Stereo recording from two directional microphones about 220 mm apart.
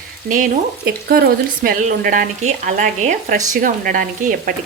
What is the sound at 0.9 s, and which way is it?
Speech, 45° right (ahead or behind).